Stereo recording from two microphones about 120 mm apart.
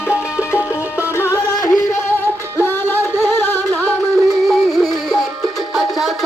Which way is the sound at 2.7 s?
15° left (ahead or behind).